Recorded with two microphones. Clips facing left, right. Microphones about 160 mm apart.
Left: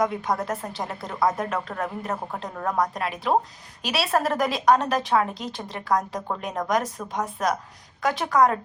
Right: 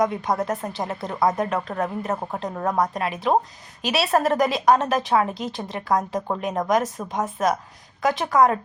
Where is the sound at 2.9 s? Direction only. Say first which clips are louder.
Right 2 dB; centre (ahead or behind).